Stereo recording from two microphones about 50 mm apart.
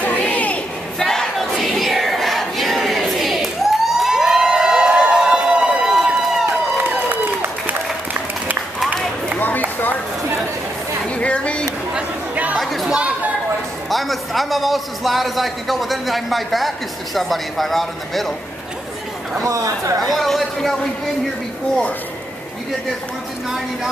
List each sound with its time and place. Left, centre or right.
0.0 s a sound: left
0.9 s crowd: centre
5.1 s run: centre
6.8 s applause: right
9.4 s run: left
11.1 s a sound: left
12.5 s chatter: centre
13.8 s a man's voice: centre
19.4 s a woman's voice: right
20.0 s speech: centre